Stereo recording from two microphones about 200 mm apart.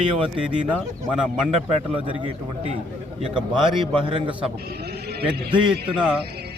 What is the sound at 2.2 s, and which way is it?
Speech, 25° right (ahead or behind).